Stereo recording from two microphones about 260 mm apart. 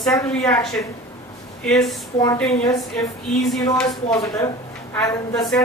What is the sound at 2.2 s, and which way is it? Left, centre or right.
Speech, centre.